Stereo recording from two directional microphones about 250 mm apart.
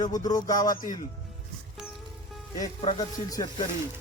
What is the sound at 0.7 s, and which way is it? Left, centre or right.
Speech, left.